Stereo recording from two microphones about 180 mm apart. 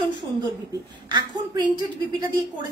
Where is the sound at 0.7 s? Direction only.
25° right (ahead or behind).